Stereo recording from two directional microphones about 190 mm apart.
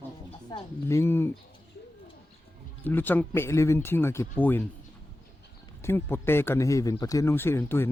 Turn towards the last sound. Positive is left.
turn(degrees=10)  # may be behind; listen again after turning